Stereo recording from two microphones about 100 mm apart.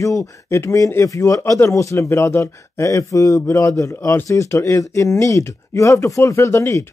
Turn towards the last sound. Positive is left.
turn(degrees=30)  # may be behind; listen again after turning